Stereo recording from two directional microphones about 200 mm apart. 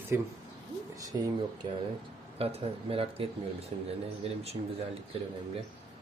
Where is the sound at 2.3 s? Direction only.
30° right (ahead or behind).